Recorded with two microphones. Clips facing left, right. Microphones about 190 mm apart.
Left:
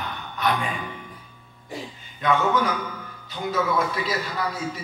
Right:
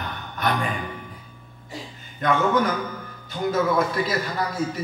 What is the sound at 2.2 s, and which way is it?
A man's voice, 50° right (ahead or behind).